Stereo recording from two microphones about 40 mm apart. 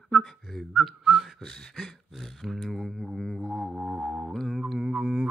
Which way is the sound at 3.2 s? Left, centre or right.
Centre.